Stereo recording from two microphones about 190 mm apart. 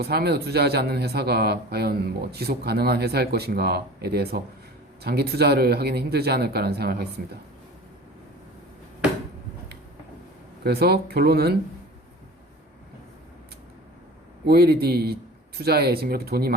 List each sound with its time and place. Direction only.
0.0 s a man's voice: 55° right (ahead or behind)
10.6 s a man's voice: 55° right (ahead or behind)
14.4 s a man's voice: 55° right (ahead or behind)